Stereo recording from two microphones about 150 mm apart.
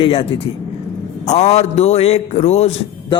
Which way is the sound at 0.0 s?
40° left (ahead or behind).